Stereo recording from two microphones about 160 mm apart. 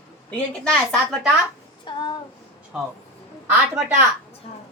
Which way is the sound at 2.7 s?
5° right (ahead or behind).